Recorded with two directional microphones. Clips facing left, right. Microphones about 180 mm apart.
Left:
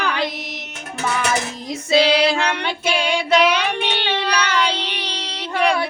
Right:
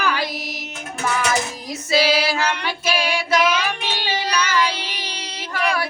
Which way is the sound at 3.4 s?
65° left (ahead or behind).